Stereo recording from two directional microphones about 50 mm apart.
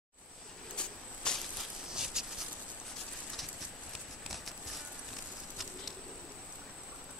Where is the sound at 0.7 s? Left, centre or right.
Centre.